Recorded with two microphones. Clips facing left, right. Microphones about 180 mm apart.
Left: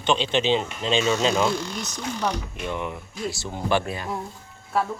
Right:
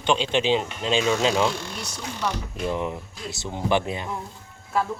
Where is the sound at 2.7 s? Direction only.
30° right (ahead or behind).